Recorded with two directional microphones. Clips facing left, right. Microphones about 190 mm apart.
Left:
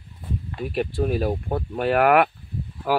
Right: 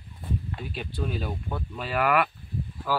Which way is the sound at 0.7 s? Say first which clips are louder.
Left 10 dB; 55° left (ahead or behind).